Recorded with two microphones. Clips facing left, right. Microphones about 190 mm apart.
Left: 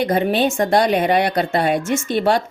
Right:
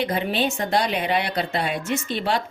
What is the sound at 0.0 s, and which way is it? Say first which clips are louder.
A woman's voice: left 6 dB; 45° left (ahead or behind).